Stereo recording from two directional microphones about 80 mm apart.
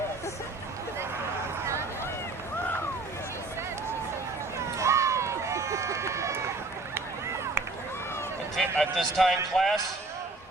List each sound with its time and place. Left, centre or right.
4.8 s run: right
8.5 s speech: centre